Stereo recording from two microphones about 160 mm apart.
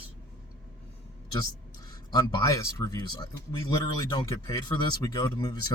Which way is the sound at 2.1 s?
25° left (ahead or behind).